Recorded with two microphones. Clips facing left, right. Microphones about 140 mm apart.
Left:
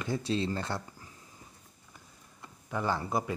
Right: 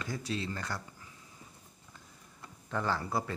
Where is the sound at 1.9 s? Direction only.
10° left (ahead or behind).